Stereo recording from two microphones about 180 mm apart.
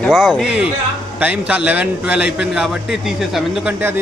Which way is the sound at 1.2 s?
10° right (ahead or behind).